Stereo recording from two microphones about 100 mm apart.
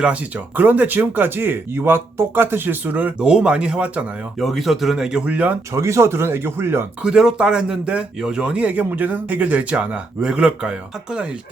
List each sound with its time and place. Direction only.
0.0 s speech: 10° right (ahead or behind)
4.4 s speech: centre (ahead or behind)
5.7 s speech: 30° right (ahead or behind)
7.0 s speech: 5° right (ahead or behind)